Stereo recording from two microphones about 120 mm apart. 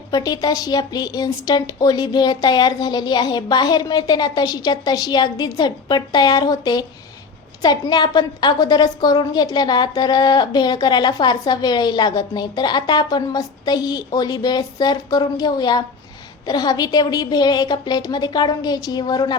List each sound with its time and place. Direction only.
0.1 s a woman's voice: 35° left (ahead or behind)